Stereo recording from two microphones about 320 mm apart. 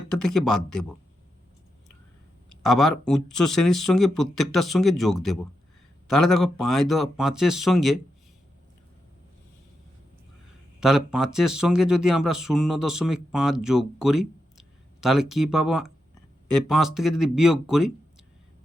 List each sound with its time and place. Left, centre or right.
0.1 s a man's voice: left
0.3 s speech: centre
2.6 s speech: centre
10.8 s speech: centre